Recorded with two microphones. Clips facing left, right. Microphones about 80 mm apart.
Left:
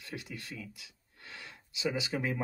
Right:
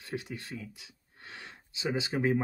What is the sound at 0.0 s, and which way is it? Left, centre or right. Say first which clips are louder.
Speech: right 5 dB; right.